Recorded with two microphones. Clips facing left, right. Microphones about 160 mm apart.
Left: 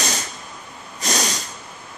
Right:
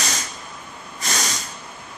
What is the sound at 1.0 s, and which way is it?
Snort, 15° left (ahead or behind).